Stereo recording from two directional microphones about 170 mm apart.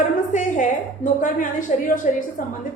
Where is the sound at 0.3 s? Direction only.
50° left (ahead or behind).